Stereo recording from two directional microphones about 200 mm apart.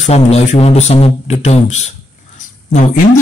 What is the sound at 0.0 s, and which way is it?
Speech, 35° left (ahead or behind).